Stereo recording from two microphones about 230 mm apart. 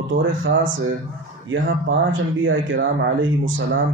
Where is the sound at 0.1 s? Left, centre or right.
Right.